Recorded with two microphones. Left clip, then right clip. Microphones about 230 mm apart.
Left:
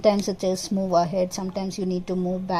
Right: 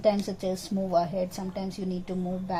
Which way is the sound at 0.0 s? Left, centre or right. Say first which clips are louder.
Left 5 dB; left.